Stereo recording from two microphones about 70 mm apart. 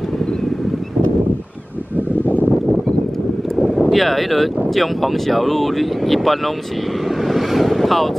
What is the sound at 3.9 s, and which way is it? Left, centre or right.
Speech, centre.